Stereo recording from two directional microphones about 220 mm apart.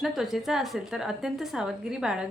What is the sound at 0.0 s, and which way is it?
A woman's voice, centre (ahead or behind).